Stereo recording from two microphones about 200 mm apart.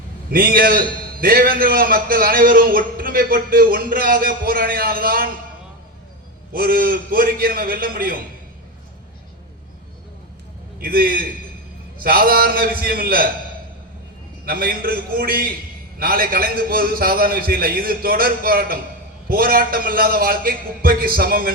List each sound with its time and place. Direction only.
0.3 s a man's voice: 45° right (ahead or behind)
6.5 s a man's voice: 45° right (ahead or behind)
10.8 s a man's voice: 50° right (ahead or behind)
14.4 s a man's voice: 45° right (ahead or behind)